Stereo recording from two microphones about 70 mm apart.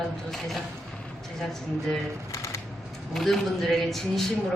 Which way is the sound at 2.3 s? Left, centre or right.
Left.